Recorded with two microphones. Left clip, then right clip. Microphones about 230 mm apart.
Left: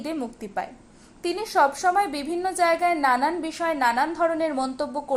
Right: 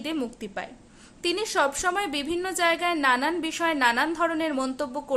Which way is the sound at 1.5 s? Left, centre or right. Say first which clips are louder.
Left 6 dB; centre.